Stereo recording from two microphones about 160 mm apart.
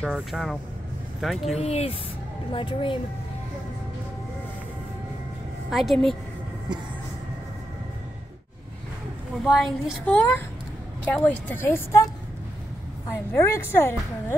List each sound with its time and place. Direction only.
0.0 s a woman's voice: centre (ahead or behind)
1.5 s a woman's voice: 40° left (ahead or behind)
5.7 s a woman's voice: centre (ahead or behind)
9.4 s a woman's voice: centre (ahead or behind)
13.3 s speech: 15° left (ahead or behind)